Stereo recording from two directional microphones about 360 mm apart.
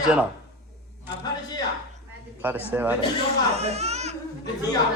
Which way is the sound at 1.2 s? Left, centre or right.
Centre.